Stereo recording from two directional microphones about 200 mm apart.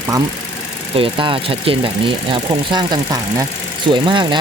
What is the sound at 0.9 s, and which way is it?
Speech, 25° right (ahead or behind).